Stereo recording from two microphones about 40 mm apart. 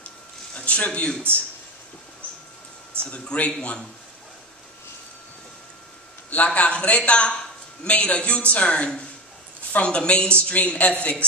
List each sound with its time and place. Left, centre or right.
0.6 s speech: left
3.0 s a man's voice: left
6.4 s a man's voice: left